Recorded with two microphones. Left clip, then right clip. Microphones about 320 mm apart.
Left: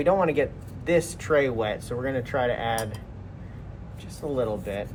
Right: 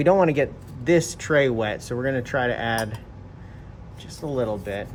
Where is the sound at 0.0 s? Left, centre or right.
Right.